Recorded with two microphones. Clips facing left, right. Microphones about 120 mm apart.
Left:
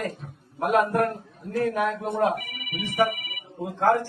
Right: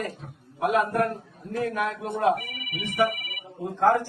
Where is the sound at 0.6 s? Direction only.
45° left (ahead or behind).